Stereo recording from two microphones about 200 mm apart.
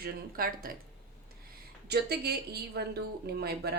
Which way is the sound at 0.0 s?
45° right (ahead or behind).